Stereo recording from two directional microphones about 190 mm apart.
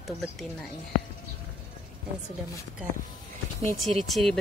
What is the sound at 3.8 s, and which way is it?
Speech, centre (ahead or behind).